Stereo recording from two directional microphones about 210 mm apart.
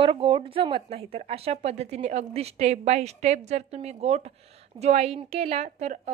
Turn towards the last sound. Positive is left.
turn(degrees=-30)  # may be behind; listen again after turning